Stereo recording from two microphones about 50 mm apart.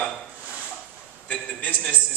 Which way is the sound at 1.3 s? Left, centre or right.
Left.